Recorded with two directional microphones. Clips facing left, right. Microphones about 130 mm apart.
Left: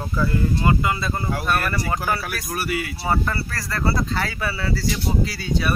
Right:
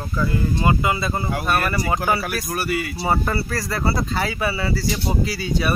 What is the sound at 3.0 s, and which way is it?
Speech, 15° right (ahead or behind).